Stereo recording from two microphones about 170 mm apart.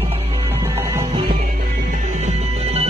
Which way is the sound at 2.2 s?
40° right (ahead or behind).